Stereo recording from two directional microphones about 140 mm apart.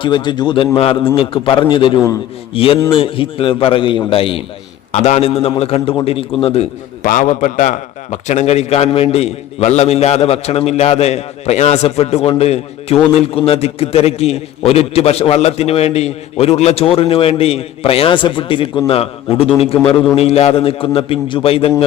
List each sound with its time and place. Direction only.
0.0 s a man's voice: 35° left (ahead or behind)
4.9 s a man's voice: 50° left (ahead or behind)
7.0 s a man's voice: 65° left (ahead or behind); by 21.8 s 45° left (ahead or behind)